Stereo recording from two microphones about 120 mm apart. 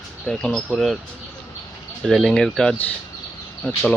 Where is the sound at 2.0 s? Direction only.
Centre (ahead or behind).